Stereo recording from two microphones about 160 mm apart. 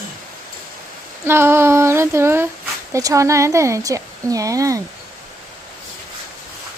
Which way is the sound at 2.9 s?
20° right (ahead or behind).